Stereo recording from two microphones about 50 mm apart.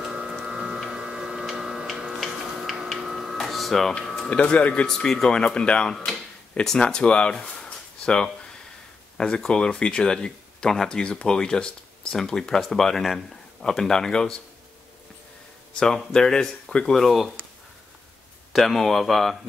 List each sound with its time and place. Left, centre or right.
0.1 s a sound: centre
0.4 s tick-tock: centre
3.0 s printer: centre
4.0 s a sound: centre
4.3 s speech: left
4.8 s speech: centre
9.5 s speech: centre
15.8 s speech: centre
18.5 s speech: centre